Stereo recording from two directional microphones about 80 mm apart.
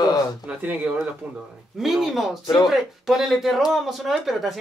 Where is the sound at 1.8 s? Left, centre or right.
Centre.